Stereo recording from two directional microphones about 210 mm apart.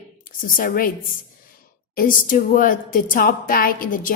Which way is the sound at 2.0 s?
40° left (ahead or behind).